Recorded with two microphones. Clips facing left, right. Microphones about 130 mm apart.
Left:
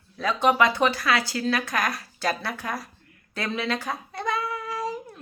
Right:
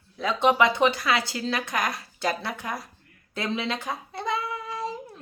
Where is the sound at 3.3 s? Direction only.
20° right (ahead or behind).